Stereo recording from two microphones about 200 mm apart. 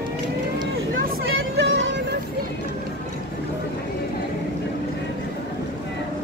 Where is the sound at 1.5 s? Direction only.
65° right (ahead or behind).